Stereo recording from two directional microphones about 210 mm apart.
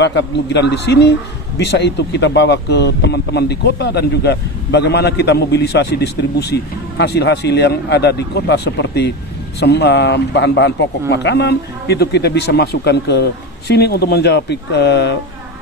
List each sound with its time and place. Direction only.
0.0 s a man's voice: 55° left (ahead or behind)